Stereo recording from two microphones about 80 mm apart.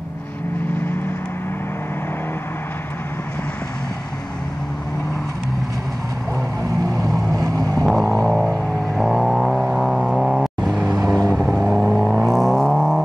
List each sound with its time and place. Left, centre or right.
6.7 s vehicle: right
8.0 s a sound: left
8.9 s vehicle: centre